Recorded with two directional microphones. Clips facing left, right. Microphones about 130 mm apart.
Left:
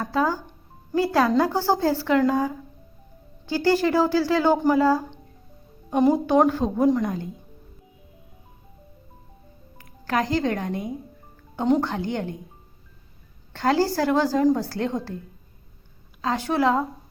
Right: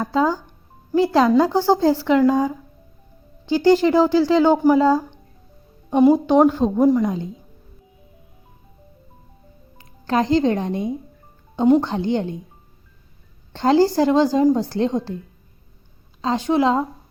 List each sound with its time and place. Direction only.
0.0 s a woman's voice: 20° right (ahead or behind)
6.4 s a woman's voice: 15° right (ahead or behind)
9.7 s speech: 25° right (ahead or behind)
11.5 s speech: 10° right (ahead or behind)
11.8 s a woman's voice: 25° right (ahead or behind)
13.5 s a woman's voice: 25° right (ahead or behind)
16.2 s a woman's voice: 20° right (ahead or behind)